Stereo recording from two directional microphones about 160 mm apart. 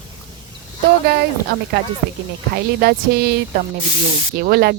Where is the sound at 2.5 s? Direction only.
75° right (ahead or behind).